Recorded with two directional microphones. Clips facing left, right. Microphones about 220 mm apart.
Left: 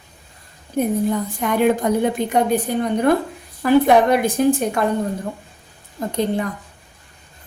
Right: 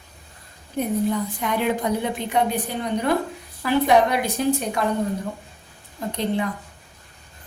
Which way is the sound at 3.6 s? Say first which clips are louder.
Left 4 dB; 50° left (ahead or behind).